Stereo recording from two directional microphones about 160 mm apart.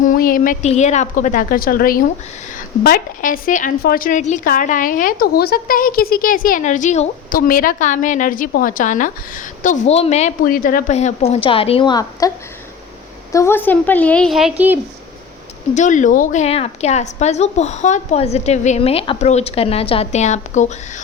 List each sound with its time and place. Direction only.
0.0 s a woman's voice: 60° left (ahead or behind)
0.7 s a woman's voice: 45° left (ahead or behind)
7.3 s a woman's voice: 60° left (ahead or behind); by 10.3 s 45° left (ahead or behind)
10.4 s a woman's voice: 60° left (ahead or behind)
10.9 s a woman's voice: 40° left (ahead or behind); by 12.3 s 25° left (ahead or behind)
13.3 s a woman's voice: 15° left (ahead or behind); by 14.5 s centre (ahead or behind)
15.7 s a woman's voice: 50° left (ahead or behind)